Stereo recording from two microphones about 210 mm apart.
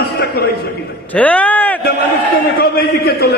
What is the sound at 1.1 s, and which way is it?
Speech, 5° left (ahead or behind).